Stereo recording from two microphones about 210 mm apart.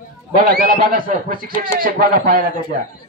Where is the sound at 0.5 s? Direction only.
45° right (ahead or behind).